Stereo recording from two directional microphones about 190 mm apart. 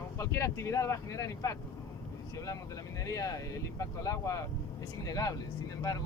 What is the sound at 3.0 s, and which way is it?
Speech, 15° left (ahead or behind).